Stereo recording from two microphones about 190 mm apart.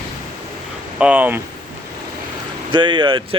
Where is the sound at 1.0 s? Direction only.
10° right (ahead or behind).